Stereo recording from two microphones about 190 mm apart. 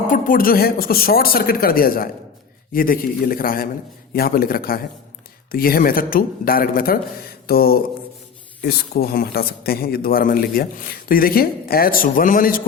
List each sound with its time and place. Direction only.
0.1 s a man's voice: 45° left (ahead or behind)
7.4 s a sound: 55° left (ahead or behind)
8.6 s a man's voice: 55° left (ahead or behind)